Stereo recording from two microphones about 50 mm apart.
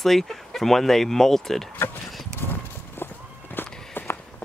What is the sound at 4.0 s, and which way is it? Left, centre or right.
Walk, left.